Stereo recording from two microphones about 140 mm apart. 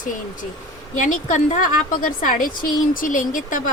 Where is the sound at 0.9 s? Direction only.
65° left (ahead or behind).